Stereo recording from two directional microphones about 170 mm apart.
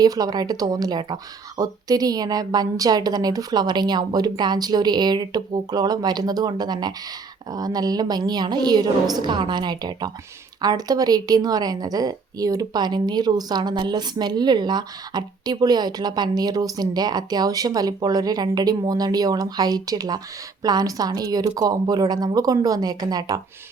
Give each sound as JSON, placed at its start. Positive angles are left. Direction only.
{"t": 0.0, "sound": "a woman's voice", "side_deg": -20}